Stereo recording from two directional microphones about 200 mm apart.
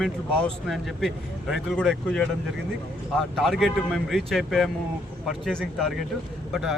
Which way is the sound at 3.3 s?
Centre (ahead or behind).